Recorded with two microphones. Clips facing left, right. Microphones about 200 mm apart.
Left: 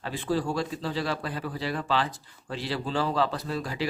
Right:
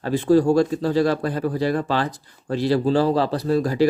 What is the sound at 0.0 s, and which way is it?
Speech, 45° right (ahead or behind).